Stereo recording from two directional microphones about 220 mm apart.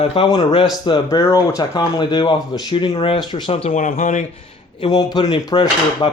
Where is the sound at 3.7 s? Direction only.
35° left (ahead or behind).